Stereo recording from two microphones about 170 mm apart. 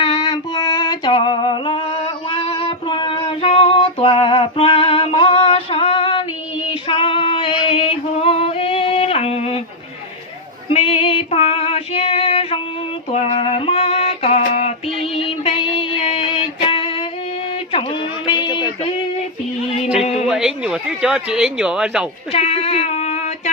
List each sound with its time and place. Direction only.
0.0 s female singing: 30° left (ahead or behind)
2.3 s child singing: 35° left (ahead or behind)
6.7 s female singing: 30° left (ahead or behind)
10.7 s female singing: 35° left (ahead or behind)
13.3 s a sound: 30° left (ahead or behind)
15.1 s music: 35° left (ahead or behind)
18.3 s a sound: 25° left (ahead or behind)
20.0 s a sound: 40° left (ahead or behind)
20.2 s speech: 5° right (ahead or behind)
22.3 s speech: 35° left (ahead or behind)